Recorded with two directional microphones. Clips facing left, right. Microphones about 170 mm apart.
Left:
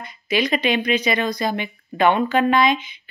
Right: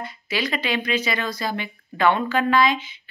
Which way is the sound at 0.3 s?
20° left (ahead or behind).